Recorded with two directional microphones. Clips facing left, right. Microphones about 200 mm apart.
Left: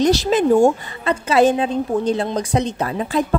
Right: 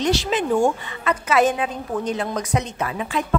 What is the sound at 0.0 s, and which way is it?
A woman's voice, 40° left (ahead or behind).